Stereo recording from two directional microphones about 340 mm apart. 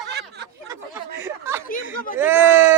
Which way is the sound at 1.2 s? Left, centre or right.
Centre.